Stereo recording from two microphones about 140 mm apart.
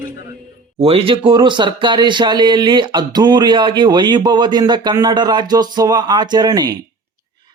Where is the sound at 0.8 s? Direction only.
45° right (ahead or behind).